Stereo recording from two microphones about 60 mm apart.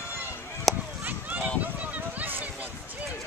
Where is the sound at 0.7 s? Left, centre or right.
Centre.